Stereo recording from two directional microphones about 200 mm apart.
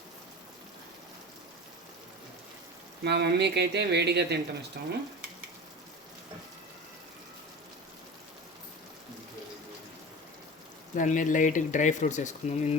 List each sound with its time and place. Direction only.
3.0 s speech: 55° right (ahead or behind)
10.9 s speech: 40° left (ahead or behind)